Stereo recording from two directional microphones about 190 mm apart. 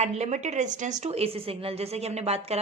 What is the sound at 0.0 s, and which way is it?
A woman's voice, 35° right (ahead or behind).